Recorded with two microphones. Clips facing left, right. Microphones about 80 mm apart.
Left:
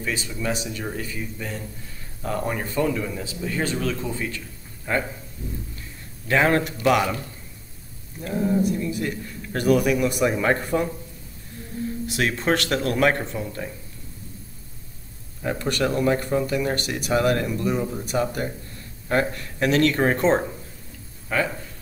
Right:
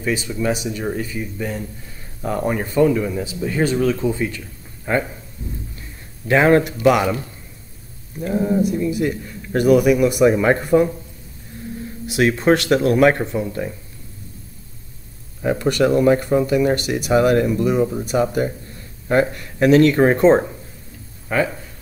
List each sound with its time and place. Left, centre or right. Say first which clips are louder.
0.0 s speech: right 6 dB; centre
2.2 s speech: right 5 dB; centre
6.2 s speech: right 6 dB; centre
8.2 s speech: right 4 dB; right
8.9 s speech: right 6 dB; centre
12.1 s speech: right 8 dB; centre
15.4 s speech: right 7 dB; centre